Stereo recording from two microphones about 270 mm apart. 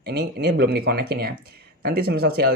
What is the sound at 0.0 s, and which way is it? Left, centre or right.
Speech, right.